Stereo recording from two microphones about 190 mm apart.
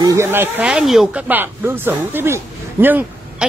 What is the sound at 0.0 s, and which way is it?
Speech, 15° right (ahead or behind).